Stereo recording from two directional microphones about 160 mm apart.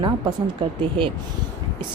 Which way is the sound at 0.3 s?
30° right (ahead or behind).